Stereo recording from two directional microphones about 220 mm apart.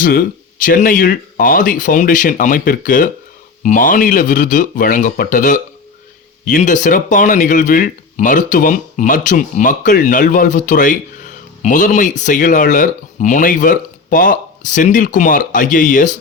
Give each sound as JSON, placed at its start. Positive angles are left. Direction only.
{"t": 0.0, "sound": "speech", "side_deg": 40}